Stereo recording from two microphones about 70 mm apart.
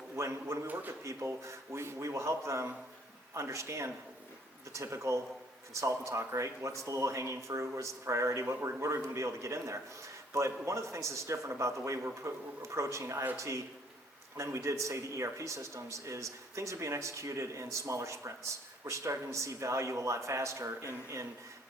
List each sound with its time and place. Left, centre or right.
0.2 s a man's voice: right
0.7 s speech: right
1.0 s a man's voice: right